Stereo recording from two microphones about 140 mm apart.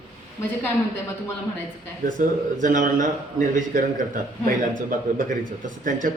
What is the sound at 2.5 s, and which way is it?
Speech, 65° right (ahead or behind).